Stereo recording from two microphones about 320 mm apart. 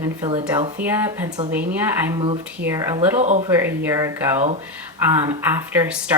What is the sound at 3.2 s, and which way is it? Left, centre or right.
Speech, right.